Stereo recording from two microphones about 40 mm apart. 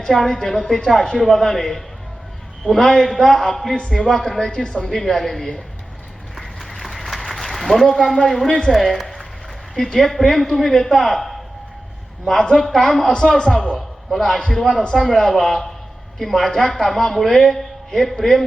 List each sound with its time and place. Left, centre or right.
0.3 s a man's voice: centre
6.3 s a sound: centre
8.7 s a man's voice: centre
12.4 s a man's voice: centre